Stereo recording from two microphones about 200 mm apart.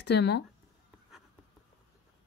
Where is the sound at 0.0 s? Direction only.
55° left (ahead or behind).